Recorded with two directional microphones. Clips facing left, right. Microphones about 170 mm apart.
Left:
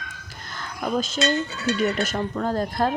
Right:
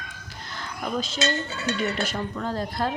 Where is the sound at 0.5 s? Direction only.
45° left (ahead or behind).